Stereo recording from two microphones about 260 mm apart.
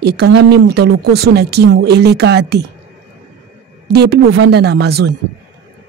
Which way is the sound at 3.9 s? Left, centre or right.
Right.